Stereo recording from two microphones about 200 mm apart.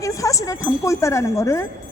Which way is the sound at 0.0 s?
15° left (ahead or behind).